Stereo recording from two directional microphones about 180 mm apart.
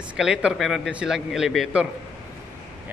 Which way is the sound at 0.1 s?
5° right (ahead or behind).